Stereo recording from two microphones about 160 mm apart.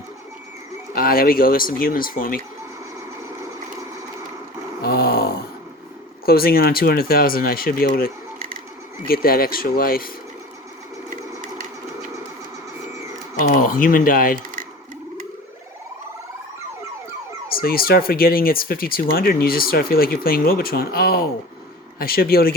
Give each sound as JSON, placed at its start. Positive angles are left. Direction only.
{"t": 0.9, "sound": "speech", "side_deg": 65}
{"t": 4.8, "sound": "a sound", "side_deg": 75}
{"t": 6.2, "sound": "speech", "side_deg": 70}
{"t": 13.4, "sound": "speech", "side_deg": 55}
{"t": 17.6, "sound": "speech", "side_deg": 70}